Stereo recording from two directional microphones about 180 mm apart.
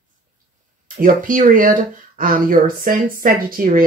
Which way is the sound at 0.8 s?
50° right (ahead or behind).